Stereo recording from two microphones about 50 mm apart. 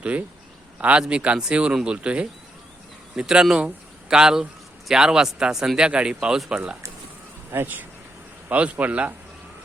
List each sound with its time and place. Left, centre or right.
0.0 s speech: right
7.5 s speech: right
8.4 s speech: right